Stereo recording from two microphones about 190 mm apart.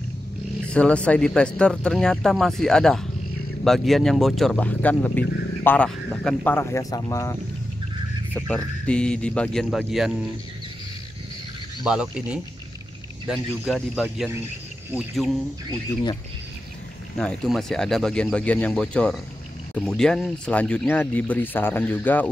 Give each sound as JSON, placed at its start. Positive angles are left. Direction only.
{"t": 0.7, "sound": "speech", "side_deg": 5}
{"t": 11.8, "sound": "speech", "side_deg": -5}
{"t": 17.2, "sound": "speech", "side_deg": 5}